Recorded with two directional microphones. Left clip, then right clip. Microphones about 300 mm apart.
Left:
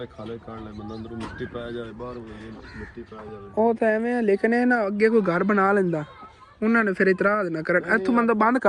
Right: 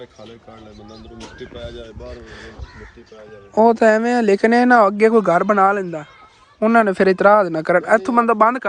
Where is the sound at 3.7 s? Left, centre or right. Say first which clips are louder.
Right 8 dB; centre.